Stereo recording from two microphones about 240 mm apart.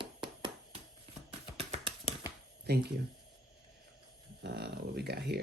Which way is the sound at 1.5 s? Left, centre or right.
Right.